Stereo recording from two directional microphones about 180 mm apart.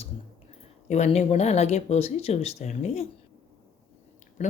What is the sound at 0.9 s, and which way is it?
Speech, 40° left (ahead or behind).